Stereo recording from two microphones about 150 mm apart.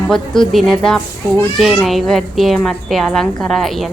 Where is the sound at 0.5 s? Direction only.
5° left (ahead or behind).